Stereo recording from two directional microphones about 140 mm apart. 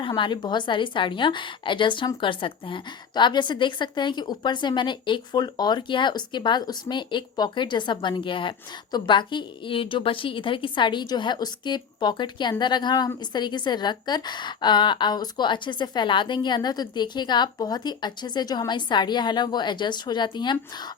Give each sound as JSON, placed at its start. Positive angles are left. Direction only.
{"t": 0.0, "sound": "a woman's voice", "side_deg": 35}